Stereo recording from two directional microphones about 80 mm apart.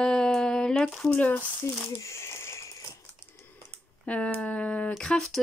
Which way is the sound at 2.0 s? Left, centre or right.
Left.